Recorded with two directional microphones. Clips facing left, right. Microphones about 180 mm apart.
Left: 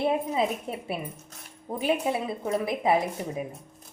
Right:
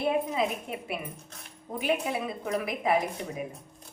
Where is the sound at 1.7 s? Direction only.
30° left (ahead or behind).